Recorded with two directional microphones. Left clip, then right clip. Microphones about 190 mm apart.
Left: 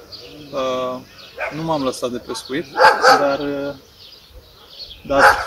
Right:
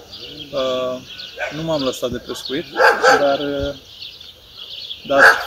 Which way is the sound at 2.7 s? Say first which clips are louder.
Left 1 dB; 55° right (ahead or behind).